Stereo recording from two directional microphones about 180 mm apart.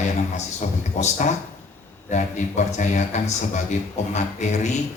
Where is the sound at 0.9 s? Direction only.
40° left (ahead or behind).